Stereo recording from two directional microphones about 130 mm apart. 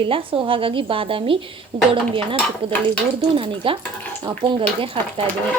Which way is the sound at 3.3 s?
45° right (ahead or behind).